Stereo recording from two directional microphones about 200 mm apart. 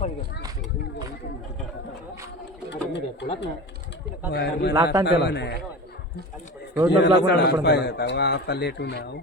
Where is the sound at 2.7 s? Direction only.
60° left (ahead or behind).